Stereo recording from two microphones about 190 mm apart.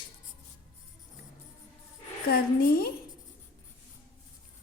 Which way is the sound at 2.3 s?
55° left (ahead or behind).